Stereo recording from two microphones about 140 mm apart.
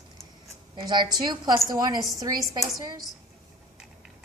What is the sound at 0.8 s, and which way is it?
A woman's voice, 35° right (ahead or behind).